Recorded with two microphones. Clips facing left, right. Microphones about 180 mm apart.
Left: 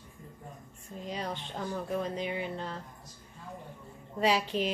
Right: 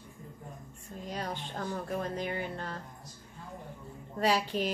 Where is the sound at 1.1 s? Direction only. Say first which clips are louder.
Left 1 dB; centre (ahead or behind).